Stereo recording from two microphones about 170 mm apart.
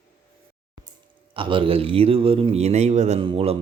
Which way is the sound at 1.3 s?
30° right (ahead or behind).